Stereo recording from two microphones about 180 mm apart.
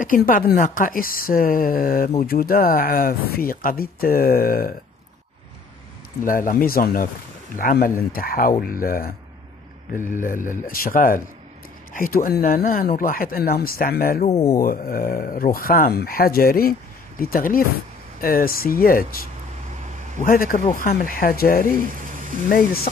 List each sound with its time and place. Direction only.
0.0 s speech: 50° left (ahead or behind)
6.2 s speech: 50° left (ahead or behind)
10.1 s speech: 45° left (ahead or behind)
14.2 s speech: 35° left (ahead or behind)
14.6 s speech: 55° left (ahead or behind)
21.9 s a sound: 45° right (ahead or behind)